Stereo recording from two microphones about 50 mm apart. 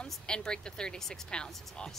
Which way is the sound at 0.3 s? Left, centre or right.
Centre.